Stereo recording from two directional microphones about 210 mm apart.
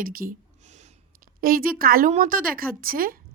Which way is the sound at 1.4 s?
45° right (ahead or behind).